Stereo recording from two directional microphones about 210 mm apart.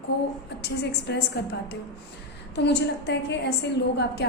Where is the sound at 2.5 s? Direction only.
55° left (ahead or behind).